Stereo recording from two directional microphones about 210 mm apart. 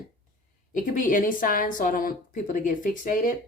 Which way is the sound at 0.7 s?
40° left (ahead or behind).